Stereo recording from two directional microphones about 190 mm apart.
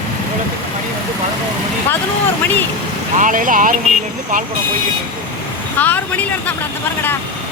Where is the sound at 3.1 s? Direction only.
45° right (ahead or behind).